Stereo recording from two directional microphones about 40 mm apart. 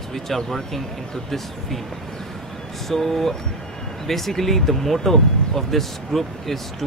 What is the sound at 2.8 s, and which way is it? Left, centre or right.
Speech, centre.